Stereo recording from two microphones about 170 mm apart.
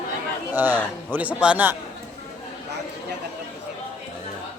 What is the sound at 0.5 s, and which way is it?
Speech, 10° right (ahead or behind).